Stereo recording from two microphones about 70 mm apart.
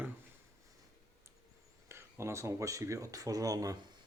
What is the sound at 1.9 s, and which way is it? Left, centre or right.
Speech, right.